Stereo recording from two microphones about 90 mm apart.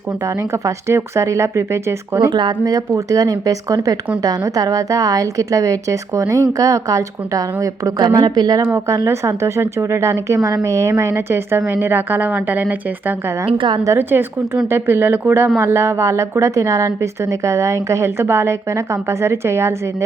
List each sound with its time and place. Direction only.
0.5 s a woman's voice: 30° right (ahead or behind)
2.3 s a woman's voice: 50° right (ahead or behind); by 13.1 s 20° right (ahead or behind)
13.5 s a woman's voice: 65° right (ahead or behind)
13.8 s a woman's voice: 30° right (ahead or behind)